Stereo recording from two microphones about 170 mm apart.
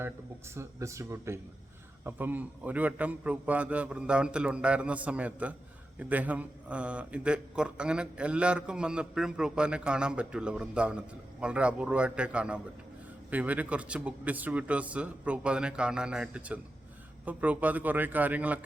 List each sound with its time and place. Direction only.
0.0 s a man's voice: 15° right (ahead or behind)